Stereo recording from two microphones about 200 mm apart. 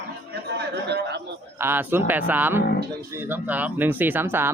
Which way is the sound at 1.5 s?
10° right (ahead or behind).